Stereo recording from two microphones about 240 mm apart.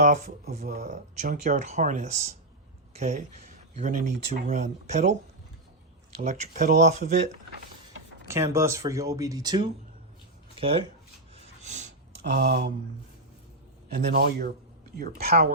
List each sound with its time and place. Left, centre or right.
0.0 s speech: right
6.2 s speech: right
8.3 s speech: centre
11.6 s a sound: right
12.5 s speech: right
14.1 s speech: right